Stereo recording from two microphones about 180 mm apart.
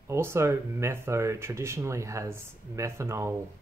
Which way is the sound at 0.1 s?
15° right (ahead or behind).